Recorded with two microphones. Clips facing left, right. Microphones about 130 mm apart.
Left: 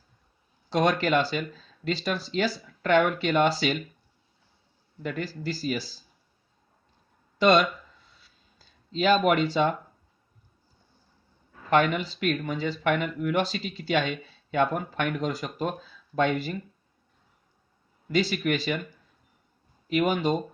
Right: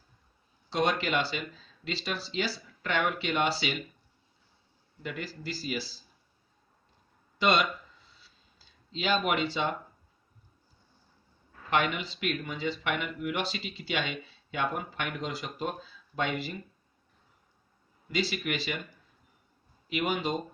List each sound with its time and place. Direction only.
0.7 s speech: 45° left (ahead or behind)
5.0 s speech: 40° left (ahead or behind)
7.3 s speech: 40° left (ahead or behind)
11.7 s speech: 40° left (ahead or behind)
18.1 s speech: 45° left (ahead or behind)
19.9 s speech: 45° left (ahead or behind)